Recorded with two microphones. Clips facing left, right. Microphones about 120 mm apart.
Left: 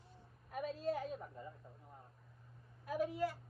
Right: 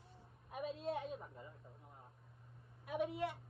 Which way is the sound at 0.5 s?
Centre (ahead or behind).